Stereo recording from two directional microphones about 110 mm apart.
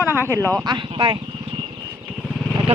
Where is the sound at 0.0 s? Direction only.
20° right (ahead or behind).